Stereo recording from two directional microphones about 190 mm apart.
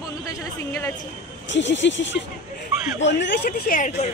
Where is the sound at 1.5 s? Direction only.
70° left (ahead or behind); by 4.1 s 40° left (ahead or behind).